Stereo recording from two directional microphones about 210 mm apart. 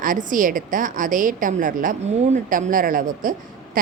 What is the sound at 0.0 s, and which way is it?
A woman's voice, 40° right (ahead or behind).